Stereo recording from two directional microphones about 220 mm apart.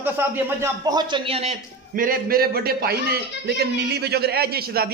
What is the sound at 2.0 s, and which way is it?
A man's voice, 40° right (ahead or behind).